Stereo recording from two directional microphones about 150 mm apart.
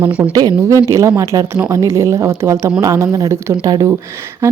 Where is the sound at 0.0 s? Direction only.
10° right (ahead or behind).